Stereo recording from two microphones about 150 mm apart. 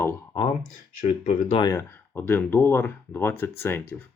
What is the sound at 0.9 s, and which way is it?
Speech, 55° left (ahead or behind).